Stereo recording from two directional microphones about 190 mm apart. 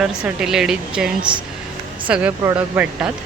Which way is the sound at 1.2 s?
25° right (ahead or behind).